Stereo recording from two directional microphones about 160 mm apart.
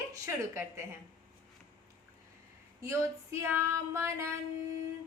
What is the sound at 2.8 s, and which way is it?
A woman's voice, 15° right (ahead or behind).